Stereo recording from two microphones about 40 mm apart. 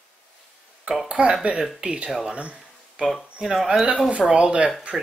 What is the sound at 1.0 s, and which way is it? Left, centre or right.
Speech, right.